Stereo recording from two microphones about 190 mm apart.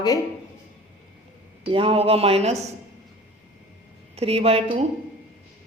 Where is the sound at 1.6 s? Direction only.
30° right (ahead or behind).